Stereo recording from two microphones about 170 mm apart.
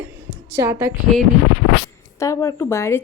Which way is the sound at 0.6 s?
15° right (ahead or behind).